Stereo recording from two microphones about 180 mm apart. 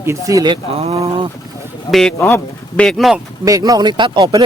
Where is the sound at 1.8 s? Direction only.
Centre (ahead or behind).